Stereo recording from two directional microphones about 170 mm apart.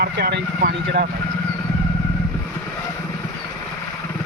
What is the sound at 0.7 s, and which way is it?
Speech, 85° right.